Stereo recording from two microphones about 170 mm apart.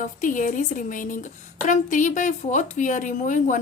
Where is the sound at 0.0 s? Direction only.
50° left (ahead or behind).